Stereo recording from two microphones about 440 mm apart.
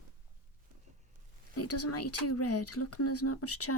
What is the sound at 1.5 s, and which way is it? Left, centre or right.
Speech, left.